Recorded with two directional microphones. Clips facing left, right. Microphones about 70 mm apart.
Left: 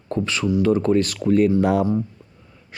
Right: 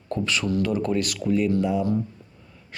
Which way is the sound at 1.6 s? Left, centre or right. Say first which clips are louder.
Left 5 dB; left.